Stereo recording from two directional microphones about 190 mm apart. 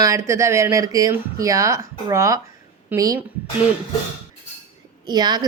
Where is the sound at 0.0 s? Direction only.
15° right (ahead or behind).